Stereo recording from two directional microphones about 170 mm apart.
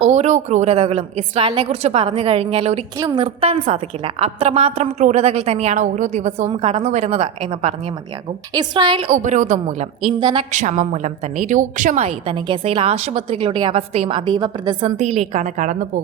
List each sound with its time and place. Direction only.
0.1 s a woman's voice: 40° right (ahead or behind)
3.0 s a woman's voice: 25° right (ahead or behind)
3.2 s a woman's voice: 40° right (ahead or behind)
6.5 s a woman's voice: 30° right (ahead or behind)
8.5 s a woman's voice: 25° right (ahead or behind)
9.0 s speech: 45° right (ahead or behind)
10.2 s a woman's voice: 30° right (ahead or behind)
10.5 s a woman's voice: 45° right (ahead or behind); by 14.9 s 30° right (ahead or behind)
14.9 s speech: 40° right (ahead or behind)